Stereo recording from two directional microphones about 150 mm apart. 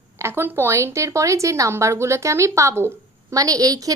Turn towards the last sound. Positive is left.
turn(degrees=-25)  # may be behind; listen again after turning